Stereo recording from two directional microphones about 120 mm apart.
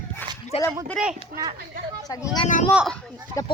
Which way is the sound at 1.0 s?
Centre (ahead or behind).